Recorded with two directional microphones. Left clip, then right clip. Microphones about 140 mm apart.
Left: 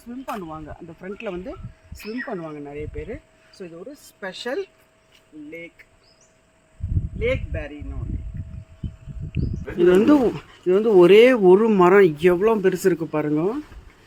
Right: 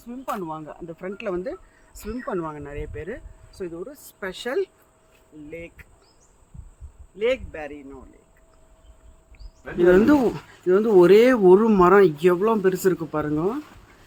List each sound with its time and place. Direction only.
0.1 s speech: 25° right (ahead or behind)
4.2 s speech: 20° right (ahead or behind)
7.2 s speech: 25° right (ahead or behind)
9.7 s speech: centre (ahead or behind)